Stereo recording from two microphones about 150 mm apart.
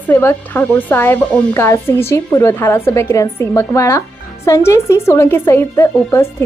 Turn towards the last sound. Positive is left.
turn(degrees=15)  # may be behind; listen again after turning